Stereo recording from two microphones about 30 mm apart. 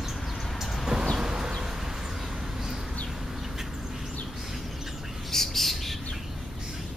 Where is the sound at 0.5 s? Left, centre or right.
Centre.